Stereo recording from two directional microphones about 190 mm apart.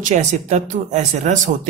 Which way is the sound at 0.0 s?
40° right (ahead or behind).